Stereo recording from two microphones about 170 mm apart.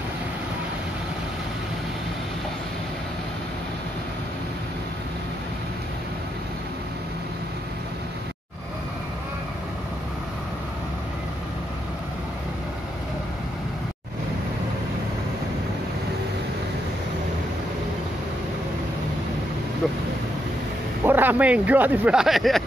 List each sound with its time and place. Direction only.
21.0 s speech: 10° right (ahead or behind)